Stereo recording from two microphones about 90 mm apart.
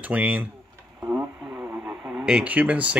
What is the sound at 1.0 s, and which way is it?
Radio, 20° right (ahead or behind).